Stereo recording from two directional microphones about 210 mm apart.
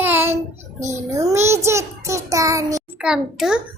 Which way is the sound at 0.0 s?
10° right (ahead or behind).